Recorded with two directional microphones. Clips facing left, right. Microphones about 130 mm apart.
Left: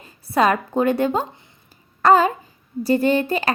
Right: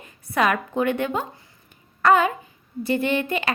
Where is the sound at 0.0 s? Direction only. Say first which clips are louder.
Left 4 dB; 30° left (ahead or behind).